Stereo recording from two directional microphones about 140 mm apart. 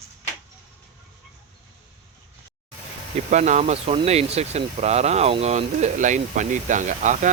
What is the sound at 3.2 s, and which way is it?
Speech, 60° right (ahead or behind).